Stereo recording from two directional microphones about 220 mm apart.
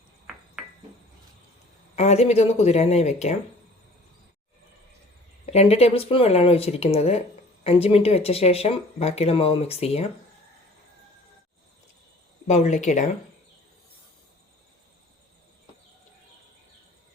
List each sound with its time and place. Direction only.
2.0 s speech: 30° left (ahead or behind)
5.5 s speech: 30° left (ahead or behind)
12.5 s speech: 30° left (ahead or behind)